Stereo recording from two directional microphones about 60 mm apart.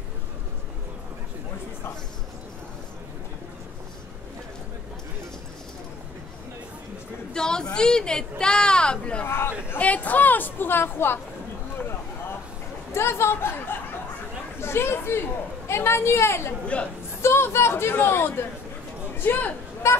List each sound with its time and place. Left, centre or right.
7.3 s speech: centre
9.2 s a woman's voice: left
9.8 s a woman's voice: left
12.9 s a woman's voice: left